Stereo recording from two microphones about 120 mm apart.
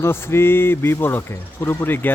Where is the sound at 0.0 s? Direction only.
20° left (ahead or behind).